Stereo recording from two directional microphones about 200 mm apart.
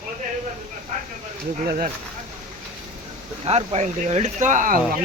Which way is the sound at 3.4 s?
30° right (ahead or behind).